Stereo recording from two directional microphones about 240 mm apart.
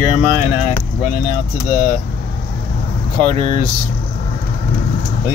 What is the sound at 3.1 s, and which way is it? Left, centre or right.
Speech, right.